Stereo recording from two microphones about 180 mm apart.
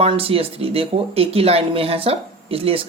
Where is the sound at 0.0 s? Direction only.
30° right (ahead or behind).